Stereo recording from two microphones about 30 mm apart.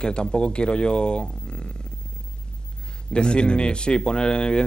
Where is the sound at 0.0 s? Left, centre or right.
Left.